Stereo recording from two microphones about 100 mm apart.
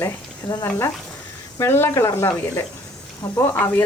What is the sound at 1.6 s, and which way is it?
Speech, 25° left (ahead or behind).